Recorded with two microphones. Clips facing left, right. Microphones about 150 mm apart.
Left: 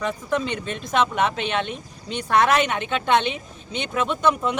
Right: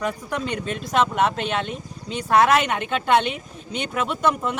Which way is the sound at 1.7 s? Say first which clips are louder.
Right 1 dB; 5° right (ahead or behind).